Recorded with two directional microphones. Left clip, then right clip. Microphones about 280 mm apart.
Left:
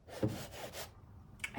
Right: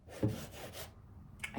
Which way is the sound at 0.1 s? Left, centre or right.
Centre.